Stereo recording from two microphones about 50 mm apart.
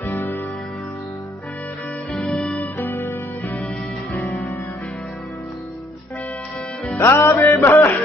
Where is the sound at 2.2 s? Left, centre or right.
Centre.